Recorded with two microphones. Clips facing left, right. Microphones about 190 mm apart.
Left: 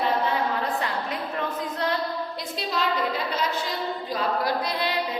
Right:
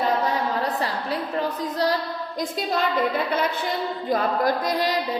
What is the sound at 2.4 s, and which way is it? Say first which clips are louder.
Speech: right 9 dB; 50° right (ahead or behind).